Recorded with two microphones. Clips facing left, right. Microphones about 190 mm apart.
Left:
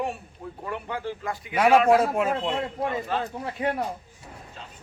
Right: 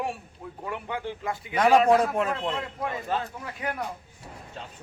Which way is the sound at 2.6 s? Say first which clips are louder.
Left 4 dB; 30° left (ahead or behind).